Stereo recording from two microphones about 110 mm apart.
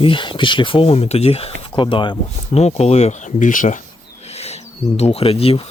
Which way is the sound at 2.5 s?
70° left (ahead or behind).